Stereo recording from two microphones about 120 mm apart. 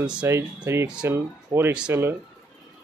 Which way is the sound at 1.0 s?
20° right (ahead or behind).